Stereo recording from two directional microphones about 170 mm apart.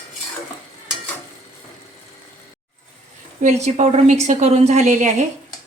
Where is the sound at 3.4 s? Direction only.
45° right (ahead or behind).